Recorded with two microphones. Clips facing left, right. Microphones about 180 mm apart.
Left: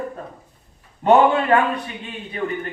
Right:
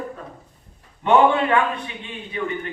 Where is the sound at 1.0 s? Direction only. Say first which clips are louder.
Left 2 dB; 40° left (ahead or behind).